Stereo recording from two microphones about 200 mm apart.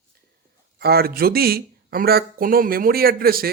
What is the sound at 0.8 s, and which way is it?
Speech, 50° right (ahead or behind).